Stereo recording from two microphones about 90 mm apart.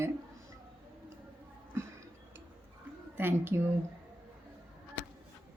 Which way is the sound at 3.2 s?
25° right (ahead or behind).